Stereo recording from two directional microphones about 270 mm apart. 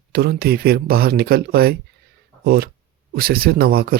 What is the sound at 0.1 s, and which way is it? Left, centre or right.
Speech, right.